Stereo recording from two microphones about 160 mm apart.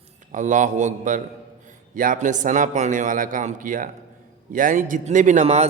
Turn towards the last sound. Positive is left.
turn(degrees=-45)  # may be behind; listen again after turning